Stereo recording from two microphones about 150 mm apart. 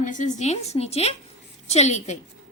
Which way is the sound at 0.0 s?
55° left (ahead or behind).